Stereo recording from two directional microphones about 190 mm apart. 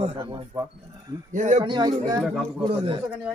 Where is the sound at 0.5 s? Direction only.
20° right (ahead or behind).